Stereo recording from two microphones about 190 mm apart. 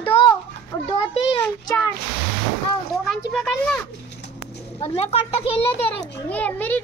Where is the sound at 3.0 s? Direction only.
5° left (ahead or behind).